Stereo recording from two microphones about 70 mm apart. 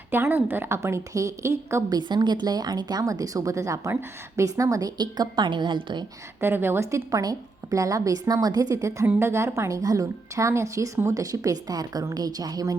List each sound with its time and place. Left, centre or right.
0.1 s speech: right
0.8 s a woman's voice: right
1.9 s a woman's voice: right
3.0 s a woman's voice: right
4.9 s a woman's voice: right
6.4 s speech: right
6.9 s a woman's voice: right